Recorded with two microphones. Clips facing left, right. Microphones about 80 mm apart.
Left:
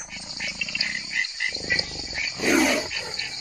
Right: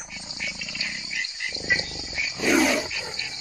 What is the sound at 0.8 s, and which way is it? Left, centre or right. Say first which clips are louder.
Dog: left 4 dB; left.